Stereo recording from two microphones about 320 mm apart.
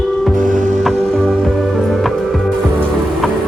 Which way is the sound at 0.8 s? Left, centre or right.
Centre.